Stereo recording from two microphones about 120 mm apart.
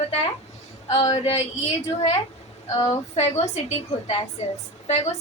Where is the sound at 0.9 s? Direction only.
35° left (ahead or behind).